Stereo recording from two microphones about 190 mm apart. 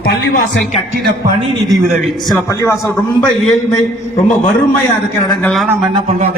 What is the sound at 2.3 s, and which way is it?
Speech, 10° left (ahead or behind).